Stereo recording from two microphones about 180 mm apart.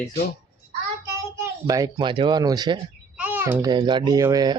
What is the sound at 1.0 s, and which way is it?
A child's voice, 15° right (ahead or behind).